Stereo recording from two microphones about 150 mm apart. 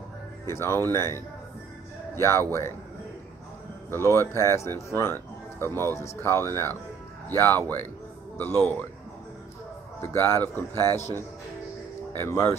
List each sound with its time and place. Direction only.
0.5 s a man's voice: 15° left (ahead or behind)
3.9 s speech: 15° left (ahead or behind)
10.0 s speech: 15° left (ahead or behind)
12.2 s speech: 15° left (ahead or behind)